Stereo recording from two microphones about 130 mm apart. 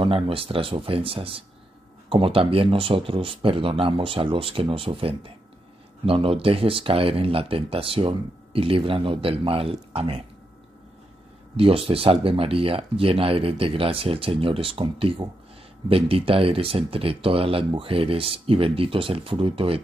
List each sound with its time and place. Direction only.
0.0 s speech: 45° right (ahead or behind)
11.5 s speech: 45° right (ahead or behind)